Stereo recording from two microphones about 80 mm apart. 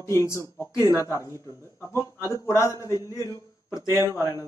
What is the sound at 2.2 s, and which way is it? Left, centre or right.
A man's voice, left.